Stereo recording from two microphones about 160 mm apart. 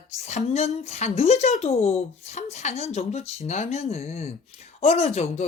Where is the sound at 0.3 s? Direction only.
45° left (ahead or behind).